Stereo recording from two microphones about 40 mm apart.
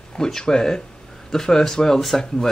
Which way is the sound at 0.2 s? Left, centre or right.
Centre.